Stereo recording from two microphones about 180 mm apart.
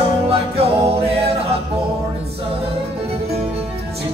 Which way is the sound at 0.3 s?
35° right (ahead or behind).